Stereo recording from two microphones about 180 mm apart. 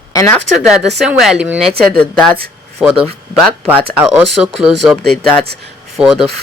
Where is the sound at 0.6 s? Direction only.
5° right (ahead or behind).